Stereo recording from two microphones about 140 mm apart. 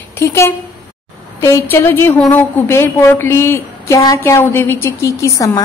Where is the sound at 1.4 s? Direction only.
15° left (ahead or behind).